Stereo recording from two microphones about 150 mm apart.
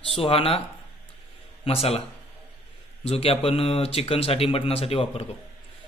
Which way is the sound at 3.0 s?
40° left (ahead or behind).